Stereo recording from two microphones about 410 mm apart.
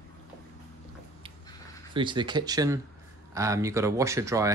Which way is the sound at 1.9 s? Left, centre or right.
Centre.